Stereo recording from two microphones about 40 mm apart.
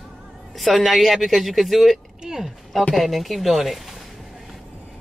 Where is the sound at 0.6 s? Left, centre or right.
Centre.